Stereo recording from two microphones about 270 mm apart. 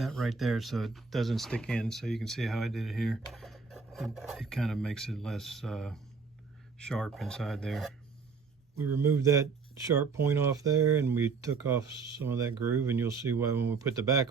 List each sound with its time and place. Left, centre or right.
0.0 s speech: centre